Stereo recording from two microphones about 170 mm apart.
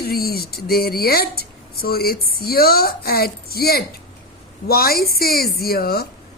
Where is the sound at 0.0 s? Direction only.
65° left (ahead or behind).